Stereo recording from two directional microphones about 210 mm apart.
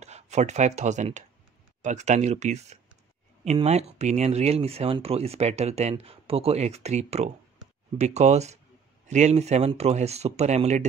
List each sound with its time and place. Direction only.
0.0 s speech: 30° right (ahead or behind)